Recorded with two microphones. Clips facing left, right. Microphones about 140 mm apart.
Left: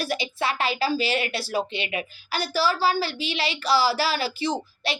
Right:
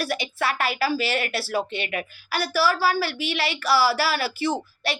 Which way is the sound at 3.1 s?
60° right (ahead or behind).